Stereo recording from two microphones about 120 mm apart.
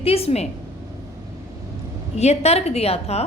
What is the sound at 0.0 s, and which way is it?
Speech, 55° left (ahead or behind).